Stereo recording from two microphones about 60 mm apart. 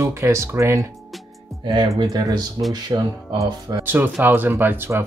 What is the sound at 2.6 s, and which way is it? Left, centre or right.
Speech, right.